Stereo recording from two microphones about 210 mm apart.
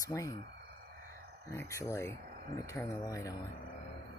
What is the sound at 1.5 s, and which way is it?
Speech, 15° left (ahead or behind).